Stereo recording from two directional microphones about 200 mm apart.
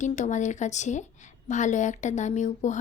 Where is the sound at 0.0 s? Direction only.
40° left (ahead or behind).